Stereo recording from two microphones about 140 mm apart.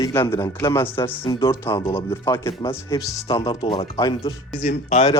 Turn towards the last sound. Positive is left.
turn(degrees=55)  # may be behind; listen again after turning